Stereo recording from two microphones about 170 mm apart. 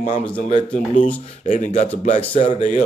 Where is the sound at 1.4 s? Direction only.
45° left (ahead or behind).